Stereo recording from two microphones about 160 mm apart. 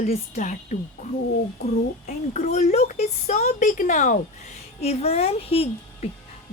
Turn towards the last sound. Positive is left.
turn(degrees=35)  # may be behind; listen again after turning